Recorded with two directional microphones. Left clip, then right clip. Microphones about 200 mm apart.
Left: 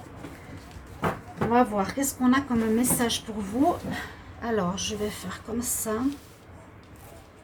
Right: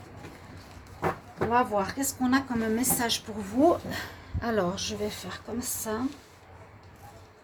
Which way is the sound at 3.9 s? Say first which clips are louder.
Left 1 dB; 60° right (ahead or behind).